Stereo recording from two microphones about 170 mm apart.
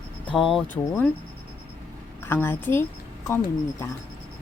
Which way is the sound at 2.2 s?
15° left (ahead or behind).